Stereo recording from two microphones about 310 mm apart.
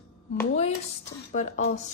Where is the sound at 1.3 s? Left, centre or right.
Left.